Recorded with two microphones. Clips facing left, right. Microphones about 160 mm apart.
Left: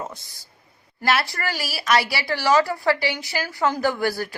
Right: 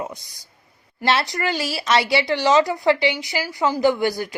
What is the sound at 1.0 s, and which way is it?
Speech, 20° right (ahead or behind).